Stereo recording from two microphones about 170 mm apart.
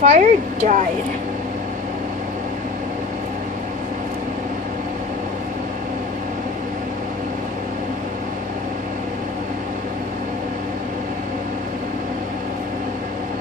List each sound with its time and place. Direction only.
0.0 s speech: 40° right (ahead or behind)